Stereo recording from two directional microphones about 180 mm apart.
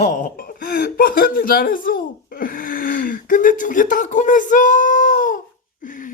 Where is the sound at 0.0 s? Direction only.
50° left (ahead or behind).